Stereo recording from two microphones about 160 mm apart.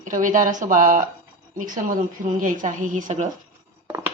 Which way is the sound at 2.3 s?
55° right (ahead or behind).